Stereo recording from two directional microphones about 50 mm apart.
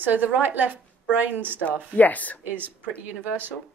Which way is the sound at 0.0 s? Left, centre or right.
Right.